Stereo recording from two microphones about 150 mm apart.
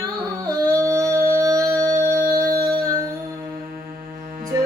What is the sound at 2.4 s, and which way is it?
Music, 25° right (ahead or behind).